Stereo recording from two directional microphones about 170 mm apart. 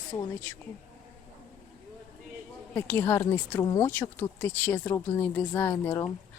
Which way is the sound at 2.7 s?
15° left (ahead or behind).